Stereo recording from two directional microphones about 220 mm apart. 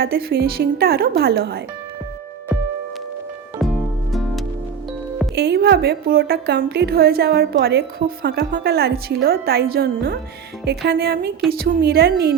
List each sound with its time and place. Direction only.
0.0 s a woman's voice: 45° right (ahead or behind)
4.1 s music: centre (ahead or behind)
5.3 s a woman's voice: 50° right (ahead or behind)